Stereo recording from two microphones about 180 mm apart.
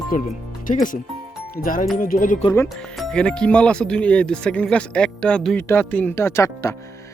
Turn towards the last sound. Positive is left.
turn(degrees=15)  # may be behind; listen again after turning